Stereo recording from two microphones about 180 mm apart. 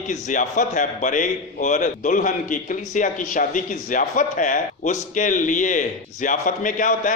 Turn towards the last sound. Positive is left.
turn(degrees=45)  # may be behind; listen again after turning